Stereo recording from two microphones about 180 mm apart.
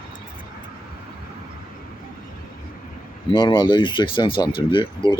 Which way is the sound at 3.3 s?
25° left (ahead or behind).